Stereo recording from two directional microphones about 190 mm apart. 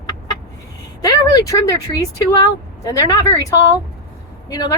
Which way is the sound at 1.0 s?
20° left (ahead or behind).